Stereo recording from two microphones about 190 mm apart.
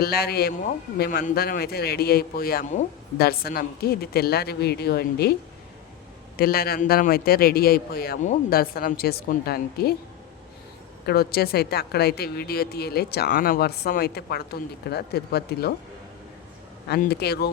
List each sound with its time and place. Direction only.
0.0 s a woman's voice: 55° left (ahead or behind)
6.3 s a man's voice: 50° left (ahead or behind)
11.0 s a woman's voice: 55° left (ahead or behind)
16.9 s a woman's voice: 55° left (ahead or behind)